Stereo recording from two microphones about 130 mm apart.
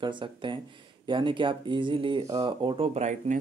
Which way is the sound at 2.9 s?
65° right (ahead or behind).